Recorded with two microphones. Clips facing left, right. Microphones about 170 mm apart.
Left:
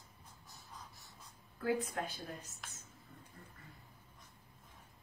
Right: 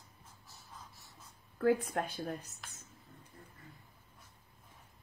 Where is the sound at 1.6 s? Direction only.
55° right (ahead or behind).